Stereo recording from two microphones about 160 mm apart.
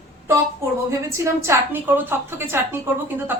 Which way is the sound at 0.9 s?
20° right (ahead or behind).